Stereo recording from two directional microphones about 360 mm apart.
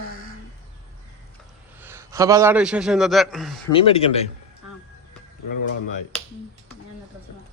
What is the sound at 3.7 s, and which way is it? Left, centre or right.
Speech, centre.